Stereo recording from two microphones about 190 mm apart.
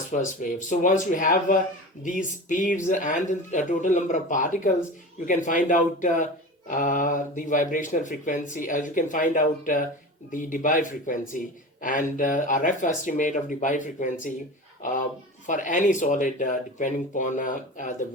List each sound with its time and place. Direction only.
0.1 s speech: 40° left (ahead or behind)